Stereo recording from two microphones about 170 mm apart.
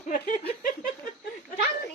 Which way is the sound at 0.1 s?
55° left (ahead or behind).